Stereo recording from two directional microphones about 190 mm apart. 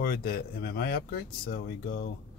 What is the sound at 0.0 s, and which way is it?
Speech, 50° left (ahead or behind).